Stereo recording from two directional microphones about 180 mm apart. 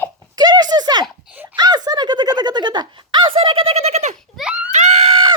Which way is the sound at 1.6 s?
20° right (ahead or behind).